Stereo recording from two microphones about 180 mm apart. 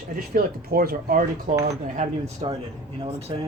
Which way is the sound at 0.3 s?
55° right (ahead or behind).